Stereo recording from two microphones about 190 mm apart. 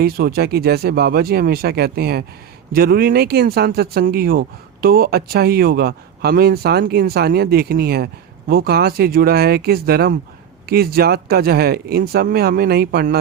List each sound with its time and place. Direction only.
0.0 s speech: 55° right (ahead or behind)